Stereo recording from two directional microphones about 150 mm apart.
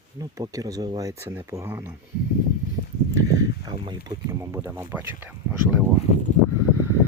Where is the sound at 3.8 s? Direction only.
25° right (ahead or behind).